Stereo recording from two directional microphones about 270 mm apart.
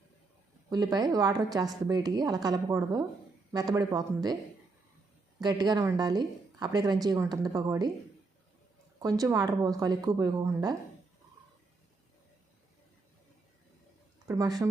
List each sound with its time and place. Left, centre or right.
0.7 s speech: centre
5.4 s speech: centre
9.0 s speech: centre
14.3 s speech: centre